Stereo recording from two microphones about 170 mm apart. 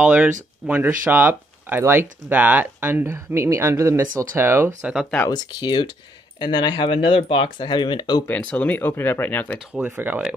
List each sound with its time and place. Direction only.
0.0 s speech: 10° right (ahead or behind)
5.2 s speech: 25° left (ahead or behind)
8.3 s speech: 5° left (ahead or behind)
9.7 s speech: 10° right (ahead or behind)